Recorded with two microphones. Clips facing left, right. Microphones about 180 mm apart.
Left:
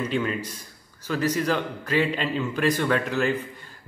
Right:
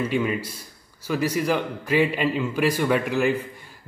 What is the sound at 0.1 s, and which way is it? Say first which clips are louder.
A man's voice: right 2 dB; 10° right (ahead or behind).